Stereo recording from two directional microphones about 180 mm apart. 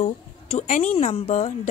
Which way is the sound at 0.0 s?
40° left (ahead or behind).